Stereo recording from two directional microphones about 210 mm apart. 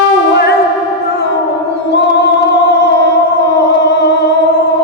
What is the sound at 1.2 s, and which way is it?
Music, 50° left (ahead or behind).